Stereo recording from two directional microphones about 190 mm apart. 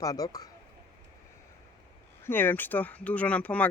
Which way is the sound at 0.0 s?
20° left (ahead or behind).